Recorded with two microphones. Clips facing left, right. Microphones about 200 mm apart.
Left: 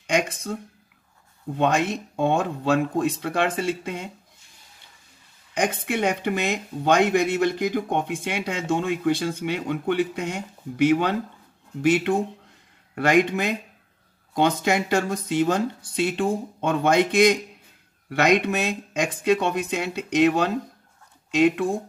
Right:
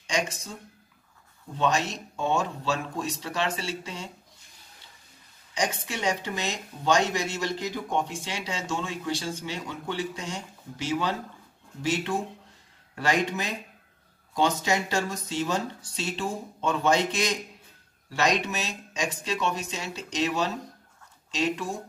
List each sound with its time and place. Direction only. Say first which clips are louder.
0.0 s speech: left 6 dB; 55° left (ahead or behind)
1.6 s speech: left 4 dB; 55° left (ahead or behind)
5.5 s speech: left 6 dB; 55° left (ahead or behind)